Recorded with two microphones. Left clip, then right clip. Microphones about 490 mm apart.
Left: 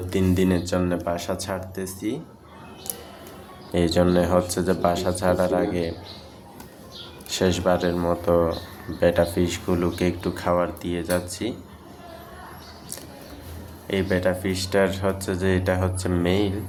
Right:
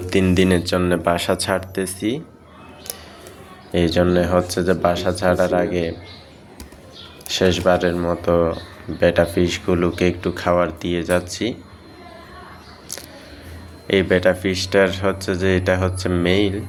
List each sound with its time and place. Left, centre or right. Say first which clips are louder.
0.1 s speech: right 6 dB; left
3.7 s speech: right 3 dB; left
7.3 s speech: right 5 dB; left
13.8 s speech: right 7 dB; left